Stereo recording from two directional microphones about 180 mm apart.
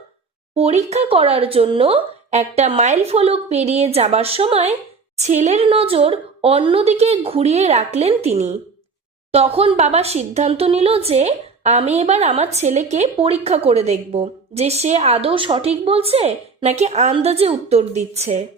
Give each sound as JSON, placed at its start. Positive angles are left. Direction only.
{"t": 0.5, "sound": "speech", "side_deg": -35}